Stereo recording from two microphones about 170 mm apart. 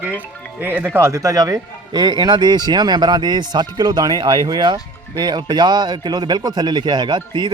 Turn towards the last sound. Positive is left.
turn(degrees=-25)  # may be behind; listen again after turning